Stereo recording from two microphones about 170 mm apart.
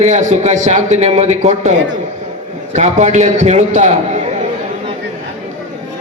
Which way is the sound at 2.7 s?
45° right (ahead or behind).